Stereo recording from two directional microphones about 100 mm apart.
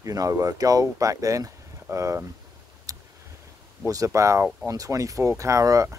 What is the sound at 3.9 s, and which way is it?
Speech, 35° right (ahead or behind).